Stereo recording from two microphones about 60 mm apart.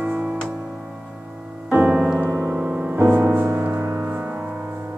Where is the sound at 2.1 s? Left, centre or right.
Right.